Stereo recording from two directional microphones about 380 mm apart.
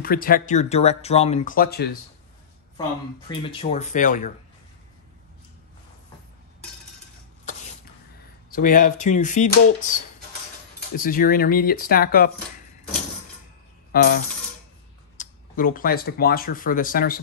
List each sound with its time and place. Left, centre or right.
0.0 s speech: left
3.3 s speech: centre
8.5 s speech: left
13.9 s speech: left